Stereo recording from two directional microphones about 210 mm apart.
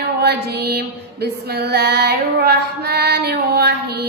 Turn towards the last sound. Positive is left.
turn(degrees=-50)  # may be behind; listen again after turning